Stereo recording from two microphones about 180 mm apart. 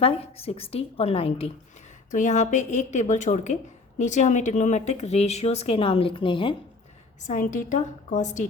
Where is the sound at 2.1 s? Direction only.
45° left (ahead or behind); by 6.6 s 25° left (ahead or behind).